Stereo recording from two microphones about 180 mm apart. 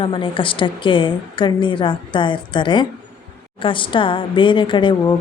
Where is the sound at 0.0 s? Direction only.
30° left (ahead or behind).